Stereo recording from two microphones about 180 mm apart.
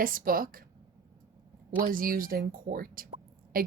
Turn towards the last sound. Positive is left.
turn(degrees=-55)  # may be behind; listen again after turning